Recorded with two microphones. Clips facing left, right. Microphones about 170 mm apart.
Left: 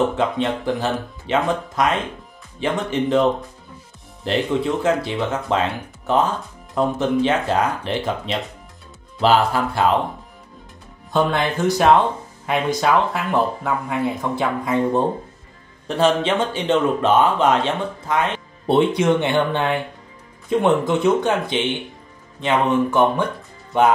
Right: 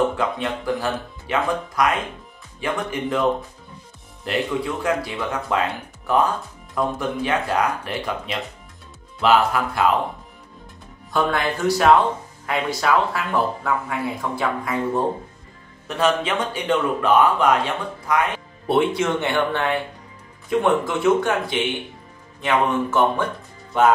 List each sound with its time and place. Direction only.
0.2 s speech: 25° left (ahead or behind)
11.1 s speech: 20° left (ahead or behind)
15.9 s speech: 30° left (ahead or behind)